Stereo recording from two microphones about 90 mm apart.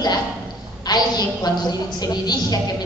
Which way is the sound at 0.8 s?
50° left (ahead or behind).